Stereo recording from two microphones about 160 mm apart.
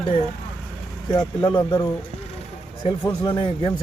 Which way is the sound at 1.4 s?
30° left (ahead or behind).